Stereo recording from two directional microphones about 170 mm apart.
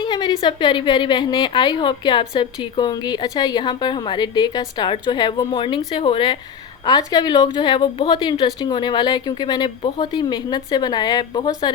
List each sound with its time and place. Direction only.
0.0 s a woman's voice: 25° left (ahead or behind)